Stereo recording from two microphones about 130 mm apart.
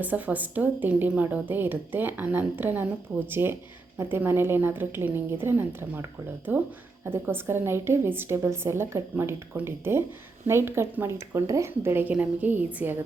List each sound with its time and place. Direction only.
0.0 s a woman's voice: 15° right (ahead or behind)